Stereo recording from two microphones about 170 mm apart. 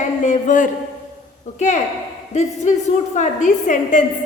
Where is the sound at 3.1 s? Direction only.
45° left (ahead or behind).